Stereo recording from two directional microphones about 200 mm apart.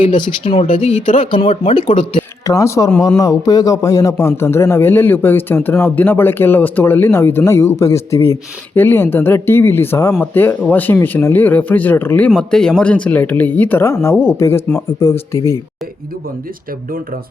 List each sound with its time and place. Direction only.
0.0 s speech: 25° left (ahead or behind)
0.7 s speech: 35° left (ahead or behind)
2.4 s a man's voice: 15° left (ahead or behind)